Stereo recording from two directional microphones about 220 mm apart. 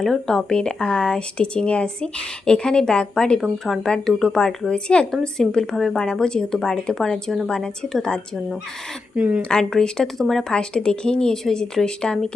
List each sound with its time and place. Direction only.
0.0 s speech: centre (ahead or behind)